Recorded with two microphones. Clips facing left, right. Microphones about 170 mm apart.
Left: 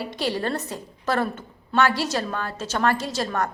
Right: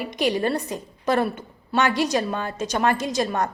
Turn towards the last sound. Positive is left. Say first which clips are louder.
# right 2 dB
turn(degrees=-20)  # may be behind; listen again after turning